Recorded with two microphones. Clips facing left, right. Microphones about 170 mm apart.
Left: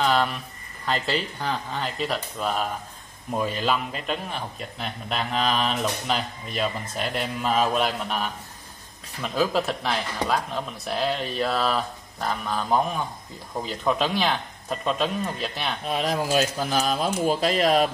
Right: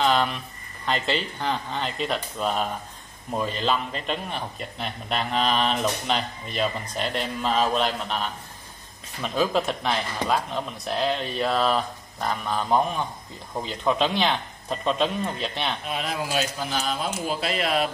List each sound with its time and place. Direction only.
0.0 s a sound: 5° left (ahead or behind)
0.8 s a man's voice: centre (ahead or behind)
9.3 s a man's voice: centre (ahead or behind)
15.8 s speech: 40° left (ahead or behind)